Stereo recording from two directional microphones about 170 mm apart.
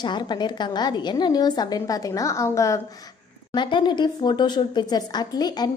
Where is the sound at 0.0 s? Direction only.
25° left (ahead or behind).